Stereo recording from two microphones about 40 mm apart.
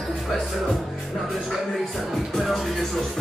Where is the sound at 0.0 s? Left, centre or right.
Centre.